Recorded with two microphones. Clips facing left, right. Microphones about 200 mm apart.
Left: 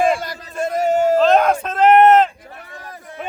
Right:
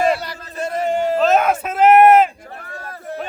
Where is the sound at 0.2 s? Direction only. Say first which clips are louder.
Left 2 dB; 45° left (ahead or behind).